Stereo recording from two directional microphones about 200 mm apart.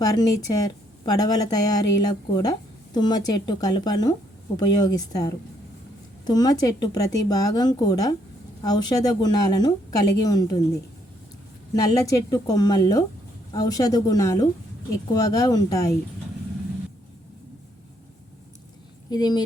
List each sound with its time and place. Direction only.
0.0 s a woman's voice: 20° left (ahead or behind)
11.7 s a woman's voice: 20° left (ahead or behind)
19.1 s a woman's voice: 20° left (ahead or behind)